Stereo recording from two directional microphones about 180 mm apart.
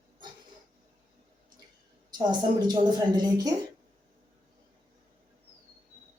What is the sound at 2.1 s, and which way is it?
A woman's voice, 25° right (ahead or behind).